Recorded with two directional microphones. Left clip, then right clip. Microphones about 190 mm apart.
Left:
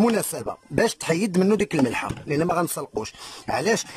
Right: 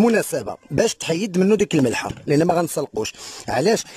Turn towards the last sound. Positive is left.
turn(degrees=-20)  # may be behind; listen again after turning